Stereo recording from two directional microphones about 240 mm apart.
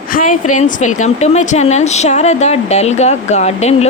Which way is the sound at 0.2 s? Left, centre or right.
Left.